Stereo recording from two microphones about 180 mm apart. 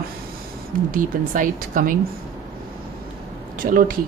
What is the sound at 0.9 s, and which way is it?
Speech, 50° right (ahead or behind).